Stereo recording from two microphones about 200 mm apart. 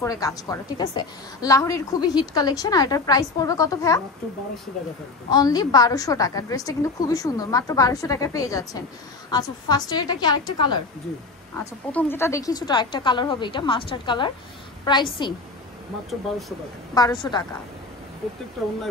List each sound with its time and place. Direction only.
0.0 s a woman's voice: 15° left (ahead or behind)
5.3 s a woman's voice: 20° left (ahead or behind)
11.6 s speech: 10° left (ahead or behind)
16.1 s speech: centre (ahead or behind)
16.9 s speech: 20° left (ahead or behind)